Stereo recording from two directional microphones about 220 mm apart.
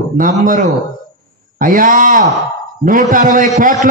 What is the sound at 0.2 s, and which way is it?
A man's voice, 35° right (ahead or behind).